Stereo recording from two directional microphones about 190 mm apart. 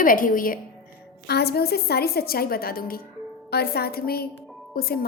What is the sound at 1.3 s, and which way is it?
A woman's voice, 55° left (ahead or behind).